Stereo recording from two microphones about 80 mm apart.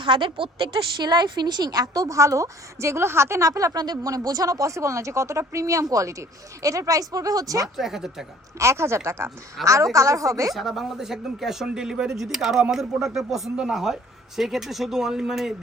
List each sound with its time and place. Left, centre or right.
0.0 s speech: right
7.8 s speech: centre
8.5 s speech: right
10.5 s speech: centre